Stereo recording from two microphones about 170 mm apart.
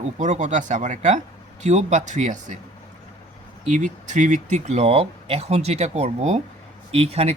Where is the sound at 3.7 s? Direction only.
45° right (ahead or behind).